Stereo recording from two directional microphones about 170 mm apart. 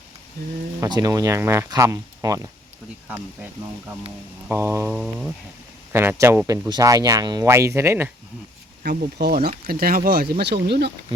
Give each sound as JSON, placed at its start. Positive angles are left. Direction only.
{"t": 0.8, "sound": "speech", "side_deg": -20}
{"t": 4.9, "sound": "a sound", "side_deg": -5}
{"t": 5.9, "sound": "speech", "side_deg": -15}
{"t": 8.8, "sound": "speech", "side_deg": -70}